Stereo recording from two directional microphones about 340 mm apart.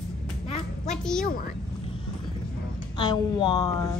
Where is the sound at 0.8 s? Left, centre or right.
Centre.